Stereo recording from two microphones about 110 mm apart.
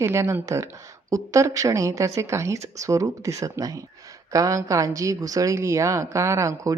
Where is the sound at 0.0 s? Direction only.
25° right (ahead or behind).